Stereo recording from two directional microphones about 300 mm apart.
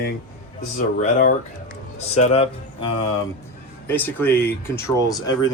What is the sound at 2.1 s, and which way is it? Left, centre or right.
Speech, centre.